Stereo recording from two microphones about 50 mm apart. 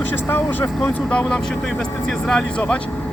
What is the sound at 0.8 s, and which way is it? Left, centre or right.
Speech, centre.